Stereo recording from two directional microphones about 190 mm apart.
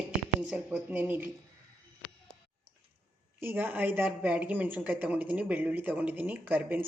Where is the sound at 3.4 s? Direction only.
10° right (ahead or behind).